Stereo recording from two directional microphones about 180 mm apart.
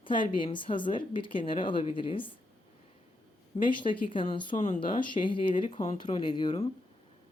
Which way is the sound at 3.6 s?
25° left (ahead or behind).